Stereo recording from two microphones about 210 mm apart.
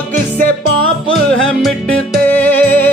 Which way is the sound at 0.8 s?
70° right (ahead or behind).